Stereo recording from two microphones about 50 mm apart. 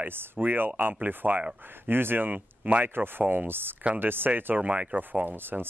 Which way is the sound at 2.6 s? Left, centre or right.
Right.